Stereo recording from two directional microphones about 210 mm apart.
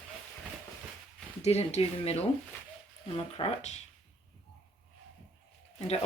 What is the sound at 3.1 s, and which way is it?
Speech, 30° left (ahead or behind).